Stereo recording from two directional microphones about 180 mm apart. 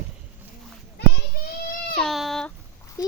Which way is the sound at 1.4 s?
55° left (ahead or behind).